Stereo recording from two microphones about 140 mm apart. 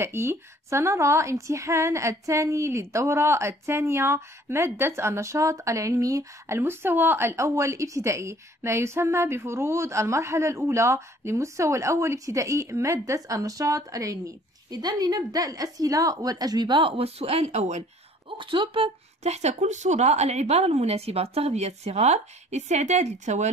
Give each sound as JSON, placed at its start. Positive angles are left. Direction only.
{"t": 0.0, "sound": "a woman's voice", "side_deg": -20}
{"t": 18.4, "sound": "speech", "side_deg": -35}
{"t": 19.2, "sound": "a woman's voice", "side_deg": -50}